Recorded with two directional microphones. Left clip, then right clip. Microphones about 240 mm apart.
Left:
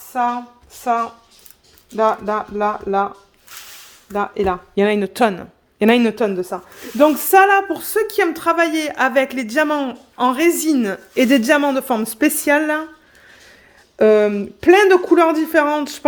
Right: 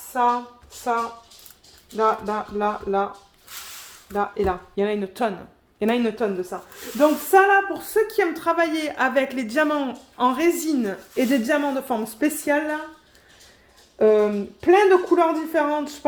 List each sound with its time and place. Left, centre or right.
0.1 s a woman's voice: left
4.1 s speech: left
14.0 s speech: left